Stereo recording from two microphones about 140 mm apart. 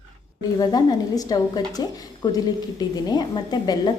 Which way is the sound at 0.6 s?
30° left (ahead or behind).